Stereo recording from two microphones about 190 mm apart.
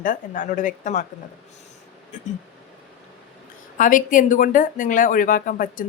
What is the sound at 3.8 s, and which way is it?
Speech, 45° left (ahead or behind).